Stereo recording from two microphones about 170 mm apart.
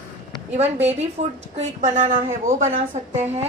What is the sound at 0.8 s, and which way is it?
A woman's voice, 40° right (ahead or behind).